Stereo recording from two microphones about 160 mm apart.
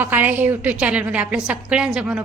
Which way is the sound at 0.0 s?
10° right (ahead or behind).